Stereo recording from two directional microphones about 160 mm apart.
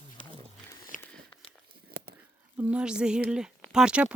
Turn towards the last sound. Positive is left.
turn(degrees=-5)  # may be behind; listen again after turning